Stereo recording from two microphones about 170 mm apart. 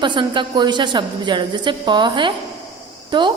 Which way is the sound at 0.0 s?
30° right (ahead or behind).